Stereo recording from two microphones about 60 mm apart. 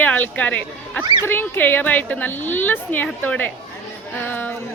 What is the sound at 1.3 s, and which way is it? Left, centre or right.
A woman's voice, left.